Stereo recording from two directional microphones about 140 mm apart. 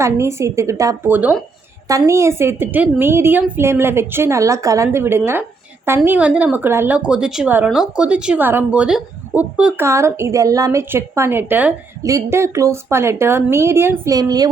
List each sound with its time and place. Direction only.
0.0 s a woman's voice: 20° right (ahead or behind)
9.8 s a woman's voice: 20° right (ahead or behind)